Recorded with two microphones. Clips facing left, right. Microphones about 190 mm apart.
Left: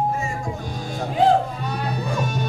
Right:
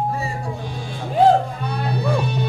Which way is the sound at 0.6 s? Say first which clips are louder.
Left 1 dB; 40° left (ahead or behind).